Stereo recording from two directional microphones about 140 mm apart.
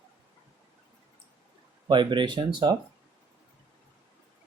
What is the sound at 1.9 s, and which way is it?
Speech, 35° right (ahead or behind).